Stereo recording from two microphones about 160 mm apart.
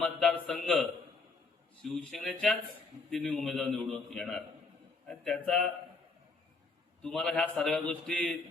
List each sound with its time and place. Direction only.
0.0 s a sound: centre (ahead or behind)
1.8 s a man's voice: 5° left (ahead or behind)
7.0 s a man's voice: 5° left (ahead or behind)